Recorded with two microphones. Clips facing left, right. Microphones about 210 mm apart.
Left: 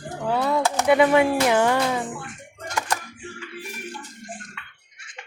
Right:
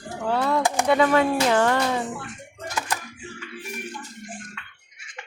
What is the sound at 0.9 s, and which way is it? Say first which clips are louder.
Speech: left 3 dB; 15° left (ahead or behind).